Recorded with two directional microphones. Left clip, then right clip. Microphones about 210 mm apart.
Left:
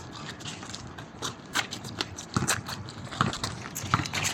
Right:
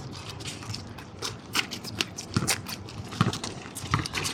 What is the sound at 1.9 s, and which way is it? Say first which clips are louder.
Biting: right 1 dB; 5° right (ahead or behind).